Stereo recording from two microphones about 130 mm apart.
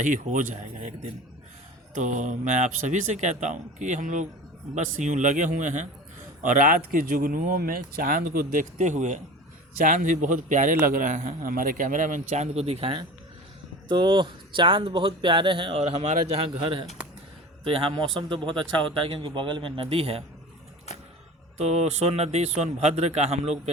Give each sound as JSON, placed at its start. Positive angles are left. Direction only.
{"t": 0.0, "sound": "speech", "side_deg": -80}
{"t": 2.0, "sound": "speech", "side_deg": -70}
{"t": 6.4, "sound": "speech", "side_deg": -85}
{"t": 9.7, "sound": "a man's voice", "side_deg": -85}
{"t": 15.8, "sound": "a man's voice", "side_deg": -55}
{"t": 21.6, "sound": "speech", "side_deg": -55}